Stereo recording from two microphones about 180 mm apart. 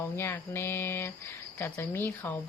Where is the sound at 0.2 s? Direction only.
15° left (ahead or behind).